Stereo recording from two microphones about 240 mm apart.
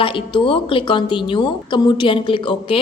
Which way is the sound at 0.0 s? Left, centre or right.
Left.